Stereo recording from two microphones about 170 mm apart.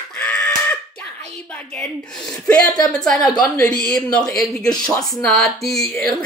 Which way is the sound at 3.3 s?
20° left (ahead or behind).